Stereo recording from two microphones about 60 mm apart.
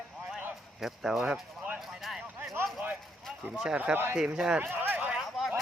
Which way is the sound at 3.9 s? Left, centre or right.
Right.